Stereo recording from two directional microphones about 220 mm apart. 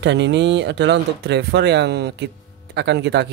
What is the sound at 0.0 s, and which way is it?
Speech, 55° right (ahead or behind).